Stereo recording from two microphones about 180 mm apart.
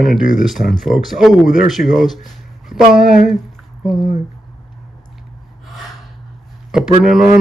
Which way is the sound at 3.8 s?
5° right (ahead or behind).